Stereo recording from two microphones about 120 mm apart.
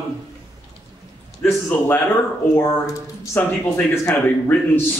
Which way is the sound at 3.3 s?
20° left (ahead or behind).